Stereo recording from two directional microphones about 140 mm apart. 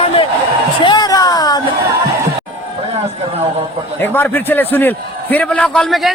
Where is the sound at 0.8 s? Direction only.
30° left (ahead or behind).